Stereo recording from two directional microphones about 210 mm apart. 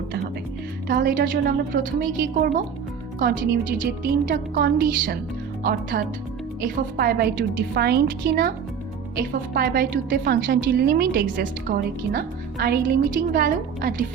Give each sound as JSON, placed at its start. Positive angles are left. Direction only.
{"t": 0.9, "sound": "speech", "side_deg": -45}
{"t": 6.6, "sound": "a woman's voice", "side_deg": -45}